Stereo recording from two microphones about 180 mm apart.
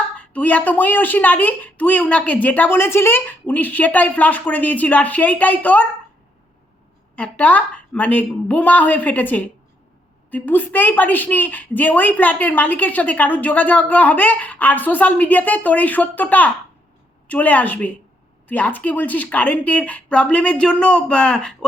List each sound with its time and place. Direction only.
0.2 s speech: 10° left (ahead or behind)
7.2 s speech: 10° left (ahead or behind)